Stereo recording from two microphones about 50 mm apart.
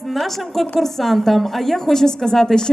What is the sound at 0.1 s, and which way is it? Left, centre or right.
A woman's voice, centre.